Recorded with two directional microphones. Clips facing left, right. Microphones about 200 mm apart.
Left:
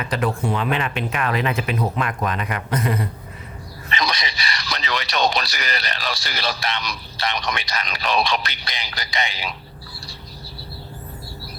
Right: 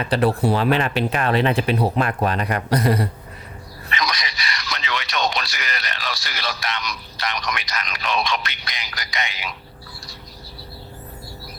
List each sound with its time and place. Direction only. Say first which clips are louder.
0.0 s speech: right 4 dB; 35° right (ahead or behind)
3.8 s speech: left 1 dB; 30° left (ahead or behind)